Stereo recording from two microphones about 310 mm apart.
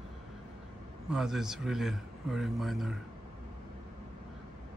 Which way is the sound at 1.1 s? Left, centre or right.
Centre.